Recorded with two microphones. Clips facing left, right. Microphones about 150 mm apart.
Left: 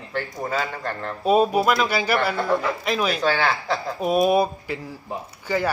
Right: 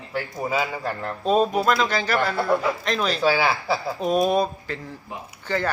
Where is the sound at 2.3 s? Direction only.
10° right (ahead or behind).